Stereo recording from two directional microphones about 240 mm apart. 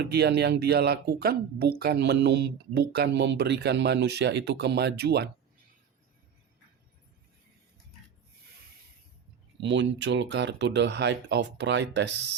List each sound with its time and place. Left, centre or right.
0.0 s speech: right
9.6 s speech: right